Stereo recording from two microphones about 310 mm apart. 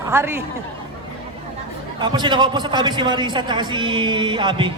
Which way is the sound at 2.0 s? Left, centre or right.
Centre.